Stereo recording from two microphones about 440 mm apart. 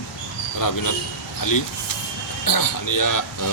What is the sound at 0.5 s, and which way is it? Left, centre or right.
Speech, left.